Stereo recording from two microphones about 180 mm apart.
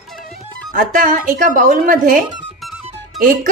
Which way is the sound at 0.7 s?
50° right (ahead or behind).